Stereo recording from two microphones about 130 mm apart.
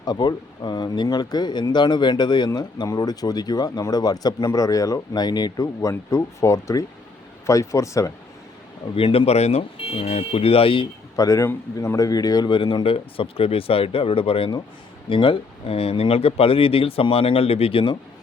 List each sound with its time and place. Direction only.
0.0 s speech: 35° left (ahead or behind)
9.0 s speech: 45° left (ahead or behind)
11.2 s speech: 25° left (ahead or behind); by 17.9 s 45° left (ahead or behind)